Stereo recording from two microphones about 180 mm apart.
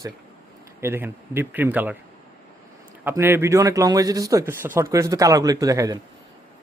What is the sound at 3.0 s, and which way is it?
A man's voice, 10° right (ahead or behind).